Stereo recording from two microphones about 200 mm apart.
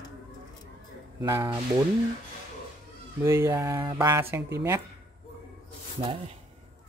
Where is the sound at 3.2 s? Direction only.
15° right (ahead or behind).